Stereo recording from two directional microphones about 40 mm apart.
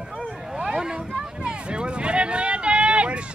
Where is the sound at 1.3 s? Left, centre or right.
Right.